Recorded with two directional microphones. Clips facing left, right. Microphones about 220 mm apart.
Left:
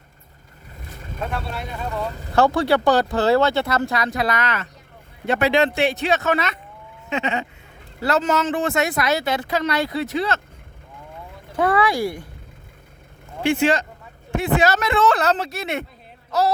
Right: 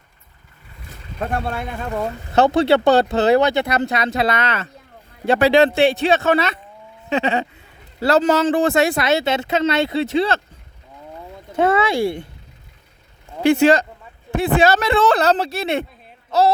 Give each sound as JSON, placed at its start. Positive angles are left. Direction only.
{"t": 1.2, "sound": "speech", "side_deg": -50}
{"t": 2.3, "sound": "speech", "side_deg": -20}
{"t": 11.5, "sound": "speech", "side_deg": -25}
{"t": 13.4, "sound": "speech", "side_deg": -40}